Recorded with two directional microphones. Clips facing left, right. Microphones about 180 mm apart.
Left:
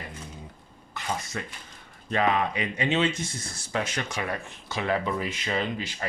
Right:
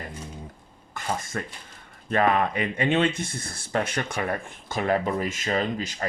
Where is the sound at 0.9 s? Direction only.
50° right (ahead or behind).